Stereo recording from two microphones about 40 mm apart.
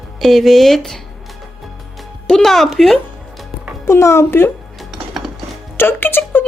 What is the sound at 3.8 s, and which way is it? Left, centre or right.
Speech, left.